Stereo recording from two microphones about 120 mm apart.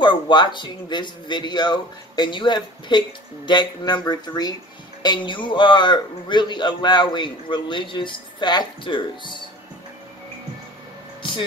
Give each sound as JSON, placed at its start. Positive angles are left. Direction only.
{"t": 0.0, "sound": "speech", "side_deg": 40}